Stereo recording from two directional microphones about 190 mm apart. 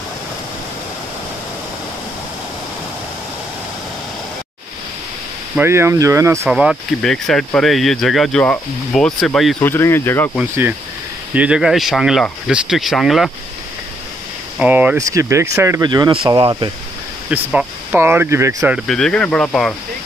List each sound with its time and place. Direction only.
5.6 s speech: 15° right (ahead or behind)
6.5 s speech: centre (ahead or behind)
9.6 s speech: 10° left (ahead or behind)
10.4 s speech: 10° right (ahead or behind)
14.6 s speech: 5° right (ahead or behind); by 16.7 s 25° right (ahead or behind)
17.3 s speech: 10° right (ahead or behind)
18.9 s speech: 5° left (ahead or behind)